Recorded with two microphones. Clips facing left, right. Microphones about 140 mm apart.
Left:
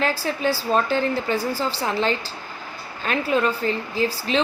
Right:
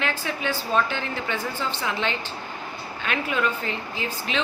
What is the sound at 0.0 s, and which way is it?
A woman's voice, 35° left (ahead or behind).